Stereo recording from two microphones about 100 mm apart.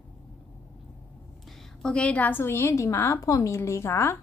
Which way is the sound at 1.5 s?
5° left (ahead or behind).